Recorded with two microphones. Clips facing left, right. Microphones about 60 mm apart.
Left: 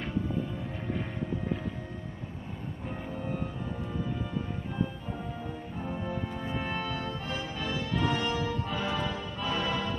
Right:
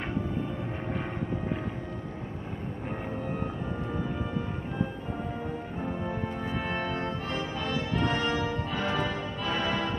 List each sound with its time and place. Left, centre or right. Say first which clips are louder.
6.0 s music: right 2 dB; right
6.5 s music: even; centre
6.8 s brass instrument: right 3 dB; right
7.7 s music: right 1 dB; right